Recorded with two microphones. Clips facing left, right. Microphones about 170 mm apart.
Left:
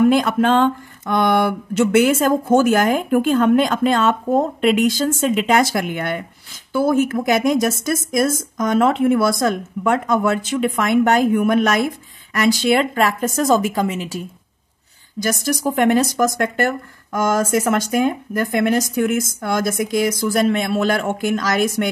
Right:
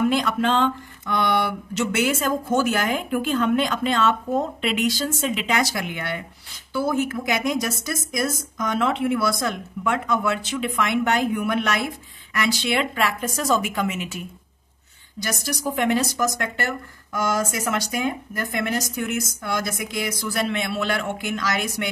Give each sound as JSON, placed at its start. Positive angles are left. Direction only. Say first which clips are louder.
{"t": 0.0, "sound": "speech", "louder": "left 6 dB", "side_deg": 50}
{"t": 15.1, "sound": "speech", "louder": "left 8 dB", "side_deg": 50}